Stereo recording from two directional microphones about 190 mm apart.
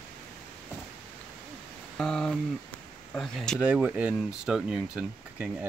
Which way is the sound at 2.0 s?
5° left (ahead or behind).